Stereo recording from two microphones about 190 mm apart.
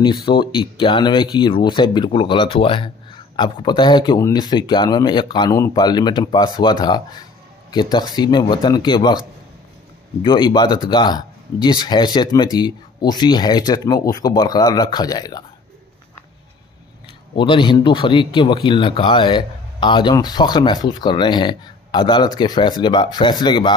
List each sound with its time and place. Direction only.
0.0 s speech: 25° left (ahead or behind)
10.2 s speech: 25° left (ahead or behind)
17.4 s speech: 25° left (ahead or behind)